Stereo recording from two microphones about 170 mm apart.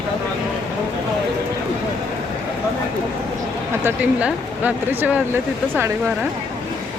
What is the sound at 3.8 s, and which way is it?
Speech, 10° right (ahead or behind).